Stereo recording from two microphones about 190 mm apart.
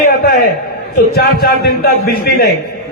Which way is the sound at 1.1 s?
55° left (ahead or behind).